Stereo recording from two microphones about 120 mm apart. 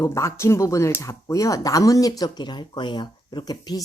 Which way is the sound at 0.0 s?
25° left (ahead or behind).